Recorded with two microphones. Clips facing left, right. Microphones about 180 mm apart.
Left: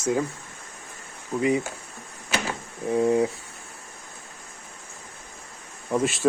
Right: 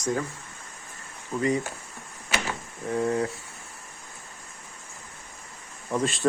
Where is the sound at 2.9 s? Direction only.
15° left (ahead or behind).